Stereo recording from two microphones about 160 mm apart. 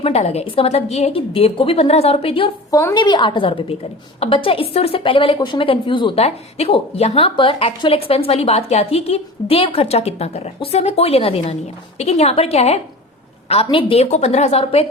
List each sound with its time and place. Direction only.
0.0 s a woman's voice: 40° left (ahead or behind)
2.6 s a woman's voice: 20° left (ahead or behind); by 14.8 s 40° left (ahead or behind)